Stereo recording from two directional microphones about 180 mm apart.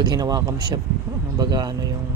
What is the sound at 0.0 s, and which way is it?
Speech, 20° right (ahead or behind).